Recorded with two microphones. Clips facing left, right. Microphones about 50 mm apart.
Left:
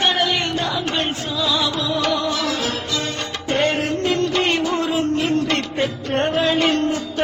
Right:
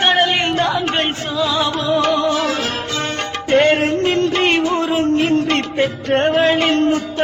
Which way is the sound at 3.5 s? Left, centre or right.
Right.